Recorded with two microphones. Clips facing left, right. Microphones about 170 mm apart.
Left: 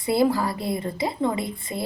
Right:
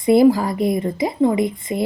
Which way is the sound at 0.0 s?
20° right (ahead or behind).